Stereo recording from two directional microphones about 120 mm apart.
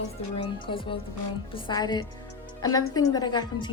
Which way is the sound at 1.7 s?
35° left (ahead or behind).